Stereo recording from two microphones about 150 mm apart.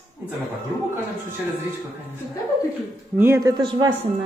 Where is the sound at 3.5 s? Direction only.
30° right (ahead or behind).